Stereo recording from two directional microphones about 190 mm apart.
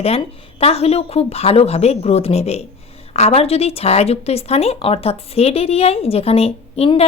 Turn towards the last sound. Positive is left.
turn(degrees=30)  # may be behind; listen again after turning